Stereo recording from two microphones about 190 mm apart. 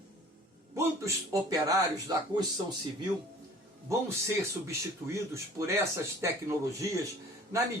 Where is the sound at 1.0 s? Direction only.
20° right (ahead or behind).